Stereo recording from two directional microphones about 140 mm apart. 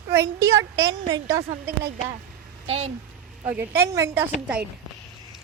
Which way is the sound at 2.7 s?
50° right (ahead or behind).